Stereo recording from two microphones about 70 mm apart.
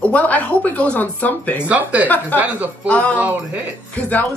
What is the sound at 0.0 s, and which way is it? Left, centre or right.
Speech, left.